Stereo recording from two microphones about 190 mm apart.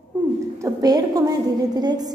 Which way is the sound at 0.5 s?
15° right (ahead or behind).